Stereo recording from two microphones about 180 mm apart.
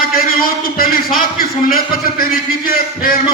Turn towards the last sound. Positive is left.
turn(degrees=50)  # may be behind; listen again after turning